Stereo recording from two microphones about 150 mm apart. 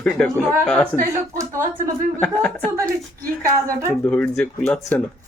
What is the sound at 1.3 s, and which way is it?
Speech, 20° right (ahead or behind).